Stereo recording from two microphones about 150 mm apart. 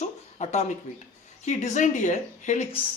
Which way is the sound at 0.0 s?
50° left (ahead or behind).